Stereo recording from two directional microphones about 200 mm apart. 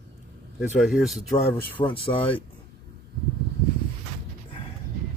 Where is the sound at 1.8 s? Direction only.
25° left (ahead or behind).